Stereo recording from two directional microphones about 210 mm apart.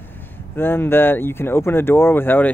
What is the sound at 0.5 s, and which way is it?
Speech, 10° left (ahead or behind).